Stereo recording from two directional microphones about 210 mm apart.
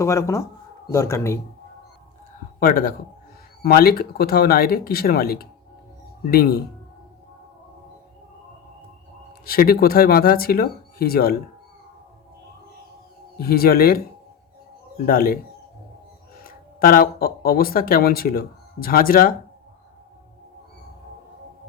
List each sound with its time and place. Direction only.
0.0 s speech: 15° left (ahead or behind)
2.6 s speech: 40° left (ahead or behind)
9.5 s speech: 45° left (ahead or behind)
13.3 s speech: 45° left (ahead or behind)
15.0 s speech: 45° left (ahead or behind)
16.4 s speech: 45° left (ahead or behind)